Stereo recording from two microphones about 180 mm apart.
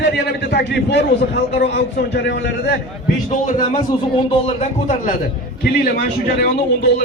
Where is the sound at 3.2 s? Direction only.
35° left (ahead or behind).